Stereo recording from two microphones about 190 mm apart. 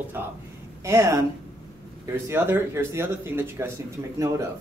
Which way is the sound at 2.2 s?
10° right (ahead or behind).